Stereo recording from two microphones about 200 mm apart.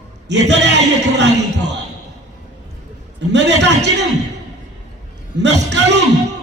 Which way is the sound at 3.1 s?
60° right (ahead or behind).